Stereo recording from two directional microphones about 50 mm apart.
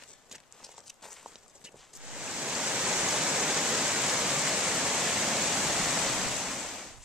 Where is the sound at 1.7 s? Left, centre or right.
Centre.